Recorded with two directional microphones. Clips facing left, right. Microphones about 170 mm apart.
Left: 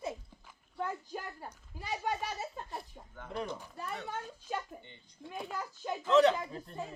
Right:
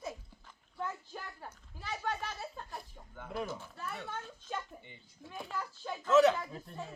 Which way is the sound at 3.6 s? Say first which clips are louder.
Left 2 dB; 15° left (ahead or behind).